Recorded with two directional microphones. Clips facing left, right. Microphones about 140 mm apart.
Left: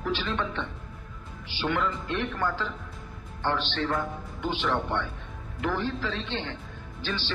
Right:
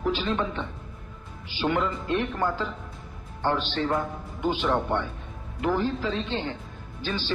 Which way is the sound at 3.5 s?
25° right (ahead or behind).